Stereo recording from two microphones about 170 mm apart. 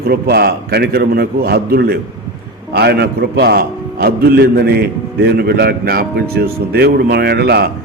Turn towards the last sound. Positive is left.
turn(degrees=-70)  # may be behind; listen again after turning